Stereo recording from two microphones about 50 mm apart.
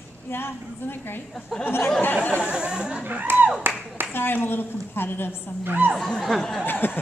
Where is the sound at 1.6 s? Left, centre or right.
Left.